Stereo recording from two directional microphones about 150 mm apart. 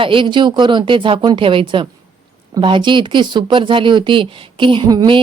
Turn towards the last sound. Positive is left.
turn(degrees=-30)  # may be behind; listen again after turning